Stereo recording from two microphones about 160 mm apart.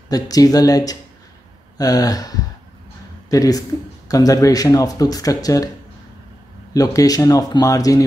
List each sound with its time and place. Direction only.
0.1 s speech: 25° left (ahead or behind)
6.7 s speech: 20° left (ahead or behind)